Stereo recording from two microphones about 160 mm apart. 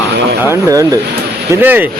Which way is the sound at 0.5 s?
20° right (ahead or behind).